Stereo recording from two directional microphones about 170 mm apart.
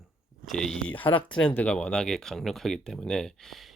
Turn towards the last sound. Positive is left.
turn(degrees=0)  # may be behind; listen again after turning